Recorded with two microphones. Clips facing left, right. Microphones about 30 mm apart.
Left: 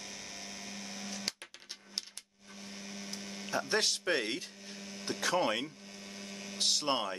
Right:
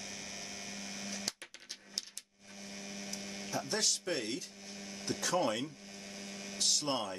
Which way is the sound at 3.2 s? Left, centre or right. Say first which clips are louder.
Even; centre.